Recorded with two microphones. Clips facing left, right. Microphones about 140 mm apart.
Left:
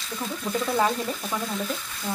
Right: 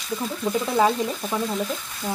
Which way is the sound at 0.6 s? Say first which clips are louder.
Right 3 dB; 15° right (ahead or behind).